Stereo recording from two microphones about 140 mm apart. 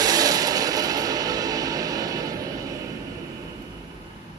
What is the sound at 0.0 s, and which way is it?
Music, 25° right (ahead or behind).